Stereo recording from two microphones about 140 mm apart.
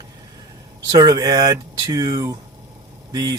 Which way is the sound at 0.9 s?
25° right (ahead or behind).